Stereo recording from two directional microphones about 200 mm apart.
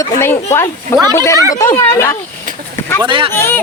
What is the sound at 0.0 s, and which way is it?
Speech, 15° left (ahead or behind).